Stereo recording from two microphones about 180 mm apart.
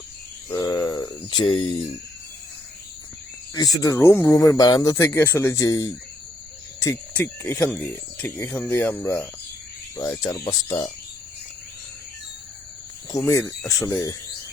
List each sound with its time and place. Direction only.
0.5 s a sound: 15° left (ahead or behind)
3.5 s speech: 20° left (ahead or behind)
13.1 s speech: 15° left (ahead or behind)